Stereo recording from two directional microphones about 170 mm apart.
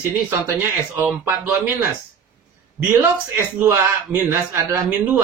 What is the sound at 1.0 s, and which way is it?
A man's voice, 10° right (ahead or behind).